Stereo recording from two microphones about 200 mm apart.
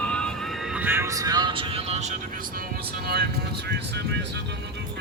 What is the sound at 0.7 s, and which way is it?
Speech, 10° right (ahead or behind).